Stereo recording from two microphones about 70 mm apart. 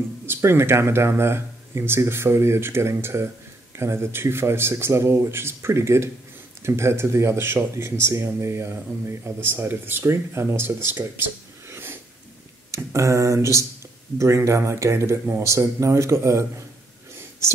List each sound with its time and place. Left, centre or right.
0.3 s speech: right
11.7 s snort: right
12.7 s speech: right